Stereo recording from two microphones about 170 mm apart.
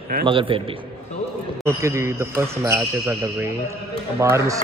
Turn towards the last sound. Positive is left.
turn(degrees=-20)  # may be behind; listen again after turning